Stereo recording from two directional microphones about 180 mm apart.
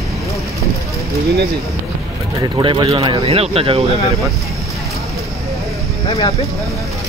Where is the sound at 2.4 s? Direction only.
25° right (ahead or behind).